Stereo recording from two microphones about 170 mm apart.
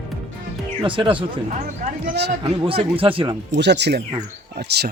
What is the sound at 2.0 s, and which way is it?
Speech, 80° right.